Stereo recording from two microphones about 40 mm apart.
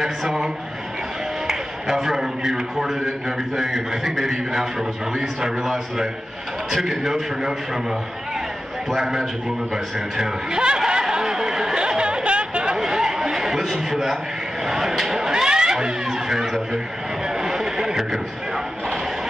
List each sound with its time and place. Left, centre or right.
0.0 s a man's voice: centre
1.5 s a man's voice: centre
10.9 s chatter: centre
12.7 s chatter: centre
13.7 s a man's voice: centre
16.7 s a sound: centre